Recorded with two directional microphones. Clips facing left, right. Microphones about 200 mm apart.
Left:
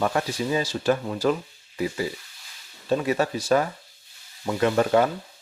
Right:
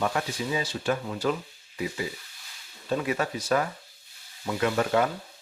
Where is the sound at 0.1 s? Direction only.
40° left (ahead or behind).